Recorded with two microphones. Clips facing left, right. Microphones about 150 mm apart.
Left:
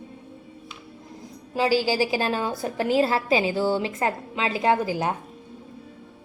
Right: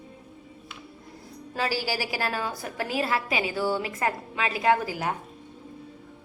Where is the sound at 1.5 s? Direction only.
15° left (ahead or behind).